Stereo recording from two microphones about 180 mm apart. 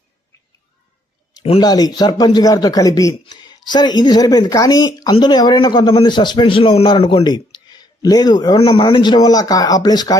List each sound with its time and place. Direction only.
1.4 s a man's voice: 30° left (ahead or behind)